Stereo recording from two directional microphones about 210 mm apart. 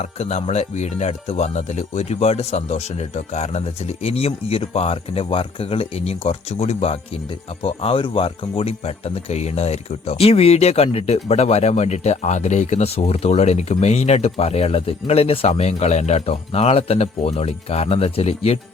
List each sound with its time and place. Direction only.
0.0 s speech: 30° left (ahead or behind)